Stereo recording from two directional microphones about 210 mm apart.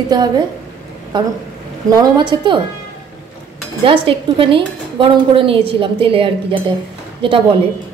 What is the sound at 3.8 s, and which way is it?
A woman's voice, 25° right (ahead or behind).